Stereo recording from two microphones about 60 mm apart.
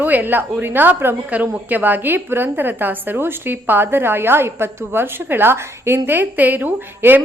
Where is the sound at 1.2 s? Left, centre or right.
Right.